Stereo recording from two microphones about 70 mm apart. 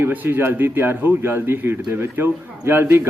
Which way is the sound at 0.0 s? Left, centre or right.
Right.